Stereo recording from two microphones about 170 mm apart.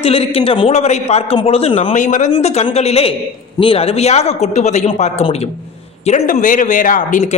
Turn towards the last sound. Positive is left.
turn(degrees=45)  # may be behind; listen again after turning